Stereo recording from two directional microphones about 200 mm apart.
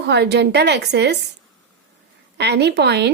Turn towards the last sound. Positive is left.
turn(degrees=-55)  # may be behind; listen again after turning